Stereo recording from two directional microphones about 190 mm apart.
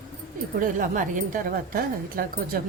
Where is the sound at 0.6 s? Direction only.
45° right (ahead or behind).